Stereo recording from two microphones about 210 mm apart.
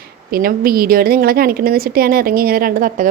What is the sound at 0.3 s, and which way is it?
A woman's voice, 45° right (ahead or behind).